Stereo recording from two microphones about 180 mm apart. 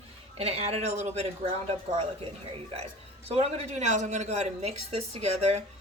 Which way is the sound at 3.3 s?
35° right (ahead or behind).